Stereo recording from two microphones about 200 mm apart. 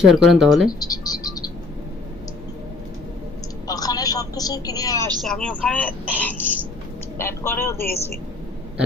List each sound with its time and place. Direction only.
0.0 s speech: centre (ahead or behind)
0.7 s music: 20° left (ahead or behind)
3.7 s vehicle: 20° left (ahead or behind)
5.2 s speech: 5° left (ahead or behind)